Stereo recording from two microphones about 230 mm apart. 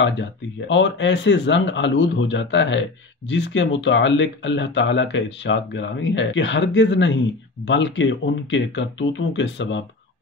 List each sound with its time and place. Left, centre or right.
0.0 s speech: left